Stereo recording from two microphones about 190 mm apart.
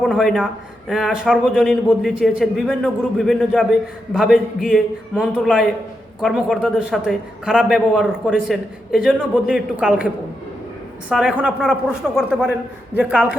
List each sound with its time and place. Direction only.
0.0 s a man's voice: centre (ahead or behind)
11.1 s a man's voice: 5° right (ahead or behind)